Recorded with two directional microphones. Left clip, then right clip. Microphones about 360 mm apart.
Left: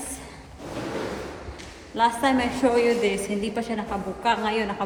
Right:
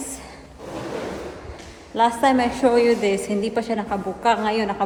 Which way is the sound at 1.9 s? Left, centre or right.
Centre.